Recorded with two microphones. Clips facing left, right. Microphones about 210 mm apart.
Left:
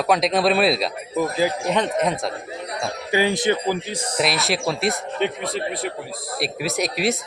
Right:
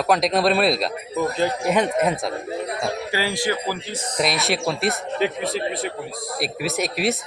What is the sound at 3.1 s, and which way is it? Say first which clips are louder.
Speech: left 7 dB; 20° left (ahead or behind).